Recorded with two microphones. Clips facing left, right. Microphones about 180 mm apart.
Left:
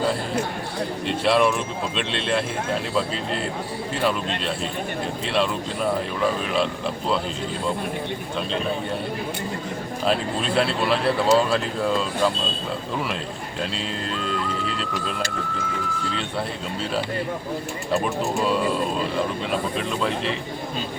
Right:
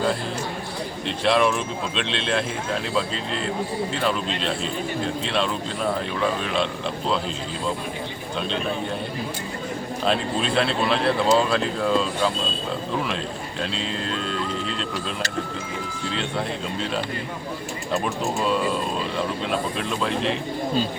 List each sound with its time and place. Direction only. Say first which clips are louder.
1.0 s speech: left 1 dB; centre (ahead or behind)
5.2 s speech: left 1 dB; 5° left (ahead or behind)
10.1 s speech: even; 5° left (ahead or behind)
14.7 s speech: even; 5° left (ahead or behind)
19.5 s speech: even; centre (ahead or behind)